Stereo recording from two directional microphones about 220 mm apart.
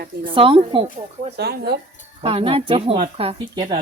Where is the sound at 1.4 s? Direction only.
50° right (ahead or behind).